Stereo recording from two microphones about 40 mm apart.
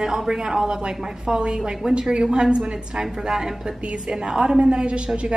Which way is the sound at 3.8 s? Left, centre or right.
Right.